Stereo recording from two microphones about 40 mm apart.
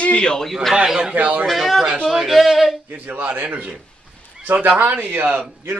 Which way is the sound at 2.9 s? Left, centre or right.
Right.